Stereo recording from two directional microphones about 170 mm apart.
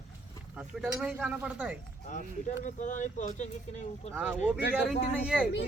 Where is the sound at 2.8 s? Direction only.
45° left (ahead or behind).